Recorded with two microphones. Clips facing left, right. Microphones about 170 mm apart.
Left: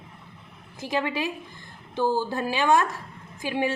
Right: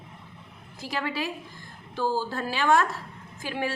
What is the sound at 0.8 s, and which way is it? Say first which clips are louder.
A woman's voice: left 3 dB; 20° left (ahead or behind).